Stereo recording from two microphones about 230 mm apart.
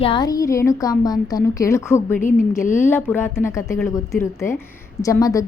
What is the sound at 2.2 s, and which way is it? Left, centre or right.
Speech, left.